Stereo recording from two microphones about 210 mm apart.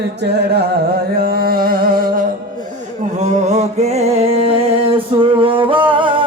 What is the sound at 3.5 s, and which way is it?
Music, 30° right (ahead or behind).